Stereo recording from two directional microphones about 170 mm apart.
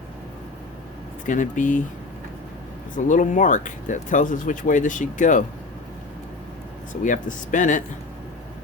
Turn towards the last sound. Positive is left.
turn(degrees=50)  # may be behind; listen again after turning